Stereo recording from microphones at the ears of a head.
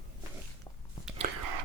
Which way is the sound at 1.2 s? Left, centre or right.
Right.